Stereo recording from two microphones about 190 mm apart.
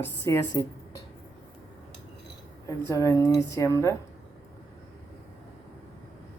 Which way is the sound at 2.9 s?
15° left (ahead or behind).